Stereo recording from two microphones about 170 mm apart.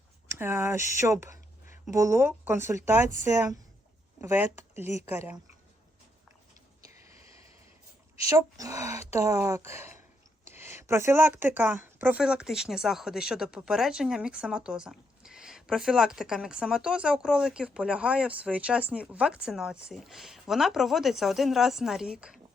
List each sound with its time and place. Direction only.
0.3 s speech: 15° right (ahead or behind)
4.2 s speech: 15° right (ahead or behind)
8.3 s speech: 20° right (ahead or behind); by 22.4 s 5° right (ahead or behind)